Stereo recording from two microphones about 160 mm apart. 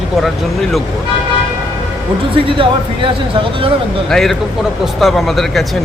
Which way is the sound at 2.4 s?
35° right (ahead or behind).